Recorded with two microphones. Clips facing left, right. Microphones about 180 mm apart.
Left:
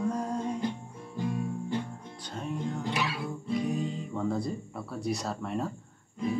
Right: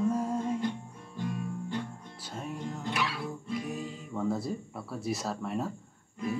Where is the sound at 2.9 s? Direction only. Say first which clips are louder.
Left 1 dB; 25° left (ahead or behind).